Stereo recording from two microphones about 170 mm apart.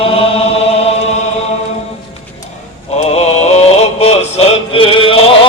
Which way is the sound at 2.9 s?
40° left (ahead or behind).